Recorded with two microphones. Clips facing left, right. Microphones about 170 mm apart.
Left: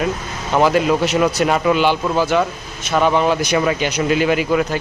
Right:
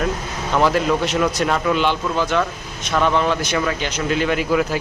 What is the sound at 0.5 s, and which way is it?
A man's voice, 5° left (ahead or behind).